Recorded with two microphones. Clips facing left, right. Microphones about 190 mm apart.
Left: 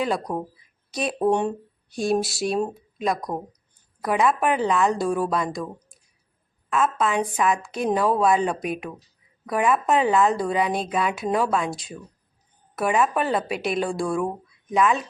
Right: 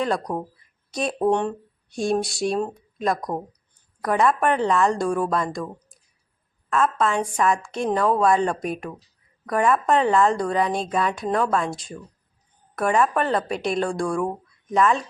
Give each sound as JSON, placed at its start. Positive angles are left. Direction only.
{"t": 0.0, "sound": "speech", "side_deg": 0}